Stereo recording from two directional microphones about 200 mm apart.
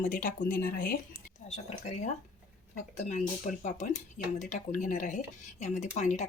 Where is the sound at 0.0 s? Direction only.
40° left (ahead or behind).